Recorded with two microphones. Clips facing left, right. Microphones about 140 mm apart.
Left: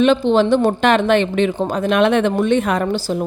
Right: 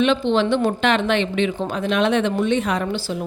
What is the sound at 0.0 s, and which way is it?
A woman's voice, 40° left (ahead or behind).